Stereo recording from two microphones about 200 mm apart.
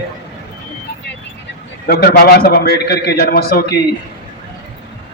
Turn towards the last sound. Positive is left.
turn(degrees=50)  # may be behind; listen again after turning